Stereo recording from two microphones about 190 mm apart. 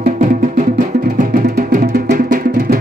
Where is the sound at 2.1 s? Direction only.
50° right (ahead or behind).